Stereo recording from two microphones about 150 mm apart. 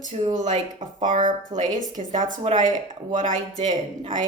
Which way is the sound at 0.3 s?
55° right (ahead or behind).